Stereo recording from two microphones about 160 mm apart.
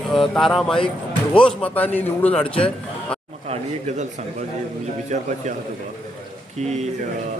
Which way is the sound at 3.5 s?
45° right (ahead or behind).